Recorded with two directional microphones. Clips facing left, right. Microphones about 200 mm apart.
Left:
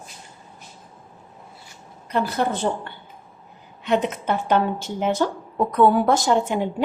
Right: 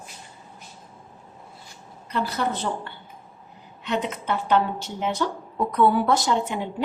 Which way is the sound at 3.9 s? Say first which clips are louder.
Left 5 dB; 50° left (ahead or behind).